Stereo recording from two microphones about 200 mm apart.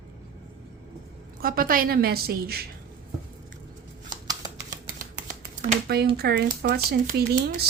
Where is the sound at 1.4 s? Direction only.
45° right (ahead or behind).